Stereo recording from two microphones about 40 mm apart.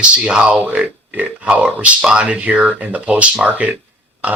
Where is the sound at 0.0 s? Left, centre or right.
Right.